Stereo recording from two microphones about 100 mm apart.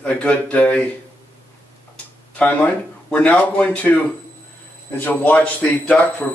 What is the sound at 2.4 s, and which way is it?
Speech, 15° left (ahead or behind).